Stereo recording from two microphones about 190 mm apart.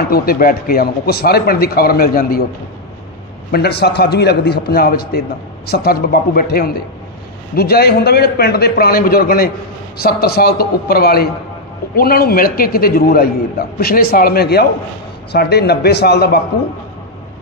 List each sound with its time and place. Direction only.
0.1 s a man's voice: 50° left (ahead or behind)
3.5 s a man's voice: 60° left (ahead or behind)